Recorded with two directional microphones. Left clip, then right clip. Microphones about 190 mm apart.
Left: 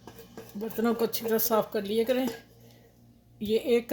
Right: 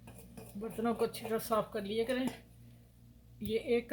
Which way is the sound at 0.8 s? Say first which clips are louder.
Left 6 dB; 55° left (ahead or behind).